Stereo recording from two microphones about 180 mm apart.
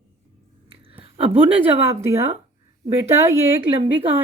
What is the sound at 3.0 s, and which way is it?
Speech, 15° right (ahead or behind).